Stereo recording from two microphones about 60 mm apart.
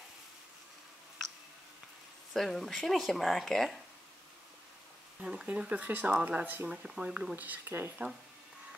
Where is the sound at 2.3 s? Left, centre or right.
Centre.